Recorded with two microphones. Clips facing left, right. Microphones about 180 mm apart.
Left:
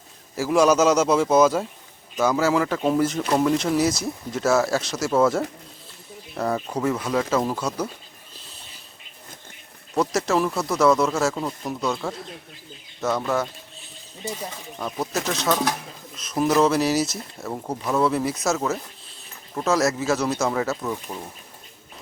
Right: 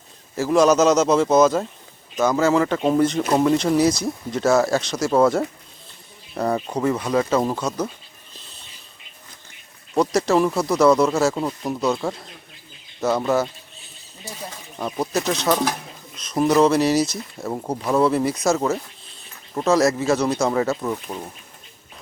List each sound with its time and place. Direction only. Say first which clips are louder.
0.3 s a man's voice: right 2 dB; 10° left (ahead or behind)
2.7 s a man's voice: right 3 dB; 5° right (ahead or behind)
10.1 s speech: right 5 dB; centre (ahead or behind)
11.3 s speech: right 3 dB; 10° right (ahead or behind)
11.8 s speech: right 4 dB; centre (ahead or behind)
14.8 s speech: right 4 dB; centre (ahead or behind)
17.5 s speech: right 3 dB; 15° right (ahead or behind)
18.0 s speech: right 3 dB; centre (ahead or behind)
19.6 s speech: right 4 dB; centre (ahead or behind)